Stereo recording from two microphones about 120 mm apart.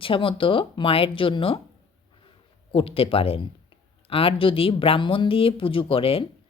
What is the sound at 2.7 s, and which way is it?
Speech, 50° left (ahead or behind).